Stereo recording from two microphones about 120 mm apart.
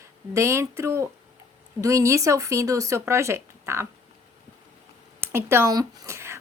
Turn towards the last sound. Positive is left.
turn(degrees=-25)  # may be behind; listen again after turning